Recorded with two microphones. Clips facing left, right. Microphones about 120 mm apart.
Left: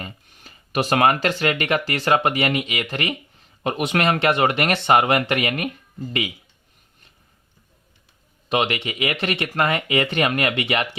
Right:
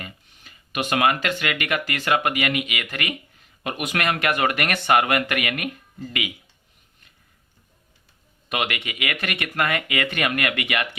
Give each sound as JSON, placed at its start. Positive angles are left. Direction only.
{"t": 0.0, "sound": "speech", "side_deg": 35}
{"t": 8.4, "sound": "speech", "side_deg": 30}